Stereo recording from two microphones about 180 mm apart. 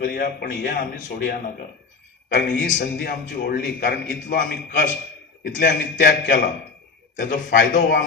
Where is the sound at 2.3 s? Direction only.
70° left (ahead or behind).